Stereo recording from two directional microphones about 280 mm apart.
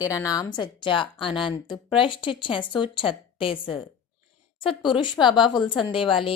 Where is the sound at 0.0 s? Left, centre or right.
Centre.